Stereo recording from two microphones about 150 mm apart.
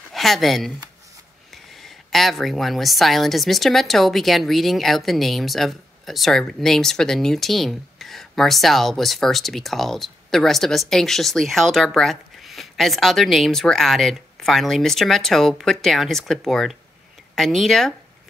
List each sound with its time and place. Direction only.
0.1 s speech: centre (ahead or behind)